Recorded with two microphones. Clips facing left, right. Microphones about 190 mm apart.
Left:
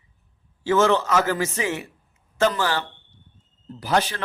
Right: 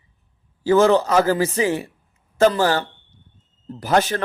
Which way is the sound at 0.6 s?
35° right (ahead or behind).